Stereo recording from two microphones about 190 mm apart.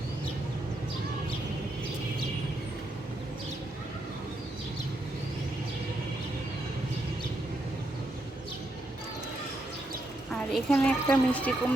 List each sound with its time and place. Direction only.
10.3 s speech: 5° left (ahead or behind)